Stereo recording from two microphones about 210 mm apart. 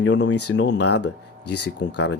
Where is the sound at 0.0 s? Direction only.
55° left (ahead or behind); by 0.6 s 75° left (ahead or behind).